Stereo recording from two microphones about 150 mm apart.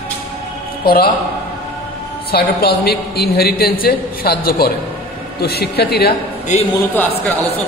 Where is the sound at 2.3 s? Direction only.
90° left.